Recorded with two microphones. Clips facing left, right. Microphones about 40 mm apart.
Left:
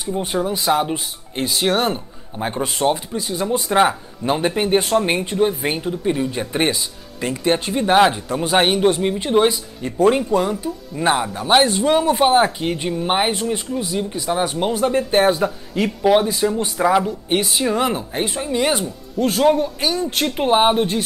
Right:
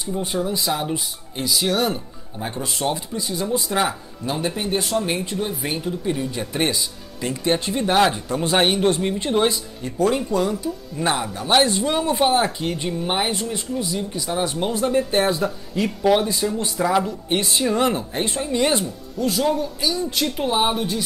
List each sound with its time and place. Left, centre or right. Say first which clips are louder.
0.2 s speech: left 2 dB; left
3.6 s speech: left 6 dB; left; by 8.8 s centre
8.8 s speech: left 3 dB; left
9.1 s speech: left 3 dB; centre
9.9 s speech: left 4 dB; left
11.6 s speech: left 4 dB; left
17.6 s speech: left 1 dB; centre
19.1 s speech: left 5 dB; left